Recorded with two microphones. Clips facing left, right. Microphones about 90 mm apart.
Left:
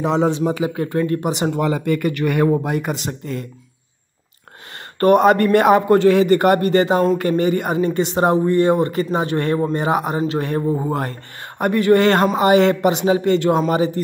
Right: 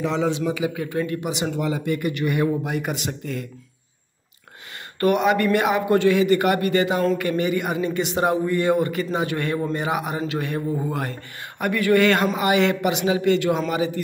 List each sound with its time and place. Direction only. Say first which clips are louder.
0.0 s speech: left 5 dB; 40° left (ahead or behind)
5.0 s speech: left 6 dB; 40° left (ahead or behind)